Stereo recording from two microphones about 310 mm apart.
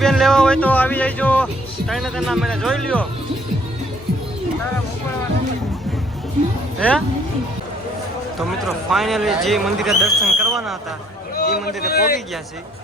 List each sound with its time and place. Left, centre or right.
0.0 s a man's voice: centre
6.7 s speech: centre
8.9 s a man's voice: centre
11.3 s a sound: left
11.8 s a man's voice: left